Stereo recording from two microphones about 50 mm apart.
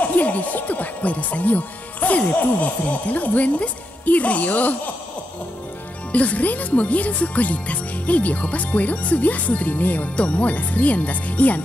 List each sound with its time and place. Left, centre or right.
0.1 s speech: left
6.1 s speech: left